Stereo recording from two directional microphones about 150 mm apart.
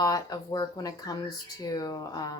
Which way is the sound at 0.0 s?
25° left (ahead or behind).